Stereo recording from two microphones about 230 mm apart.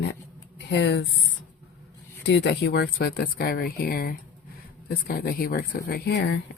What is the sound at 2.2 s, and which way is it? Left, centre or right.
A woman's voice, left.